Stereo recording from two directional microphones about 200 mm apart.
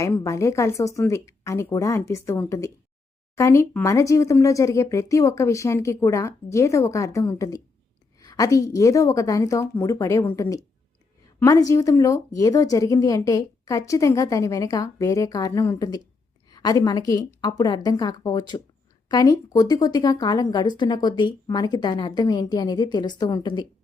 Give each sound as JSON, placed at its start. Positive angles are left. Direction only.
{"t": 0.0, "sound": "a woman's voice", "side_deg": 15}